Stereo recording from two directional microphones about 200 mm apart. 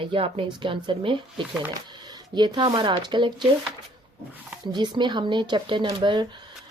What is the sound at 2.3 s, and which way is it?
Speech, 20° right (ahead or behind).